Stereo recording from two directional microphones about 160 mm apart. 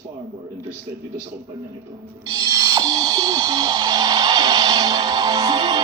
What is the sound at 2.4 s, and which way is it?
Music, 25° right (ahead or behind).